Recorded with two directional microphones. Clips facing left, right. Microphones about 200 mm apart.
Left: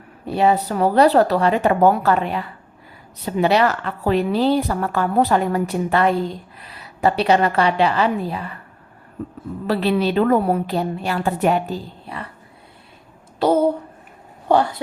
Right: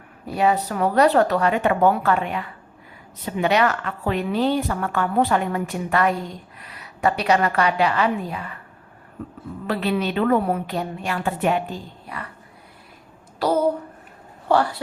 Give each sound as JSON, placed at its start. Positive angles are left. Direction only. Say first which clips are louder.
{"t": 0.3, "sound": "a woman's voice", "louder": "left 3 dB", "side_deg": 30}
{"t": 9.6, "sound": "a woman's voice", "louder": "left 4 dB", "side_deg": 35}
{"t": 13.4, "sound": "a sound", "louder": "left 4 dB", "side_deg": 25}
{"t": 14.4, "sound": "speech", "louder": "left 2 dB", "side_deg": 20}